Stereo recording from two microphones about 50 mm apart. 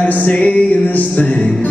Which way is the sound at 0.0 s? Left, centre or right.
Left.